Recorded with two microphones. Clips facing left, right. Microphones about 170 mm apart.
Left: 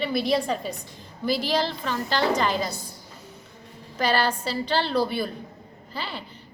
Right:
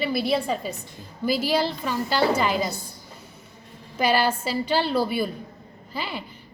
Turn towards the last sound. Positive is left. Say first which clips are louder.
# right 2 dB
turn(degrees=-10)  # may be behind; listen again after turning